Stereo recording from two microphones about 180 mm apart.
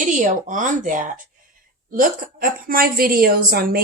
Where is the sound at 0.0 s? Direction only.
45° right (ahead or behind).